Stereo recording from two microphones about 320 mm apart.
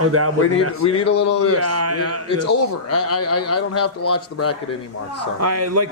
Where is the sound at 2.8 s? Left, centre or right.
Left.